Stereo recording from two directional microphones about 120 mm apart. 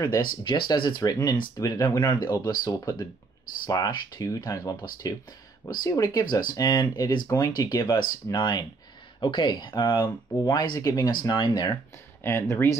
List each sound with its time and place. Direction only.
0.0 s speech: 30° left (ahead or behind)
0.5 s speech: 40° left (ahead or behind)
12.2 s speech: 20° left (ahead or behind)